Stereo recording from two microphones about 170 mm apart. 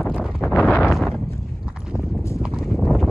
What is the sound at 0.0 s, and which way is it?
Wind noise, 5° left (ahead or behind).